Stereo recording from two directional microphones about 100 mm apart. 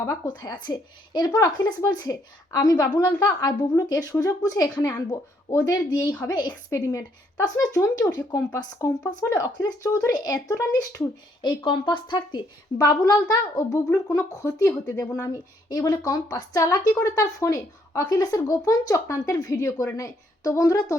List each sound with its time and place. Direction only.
0.3 s speech: 45° left (ahead or behind)
11.4 s a woman's voice: 50° left (ahead or behind)
12.9 s speech: 35° left (ahead or behind)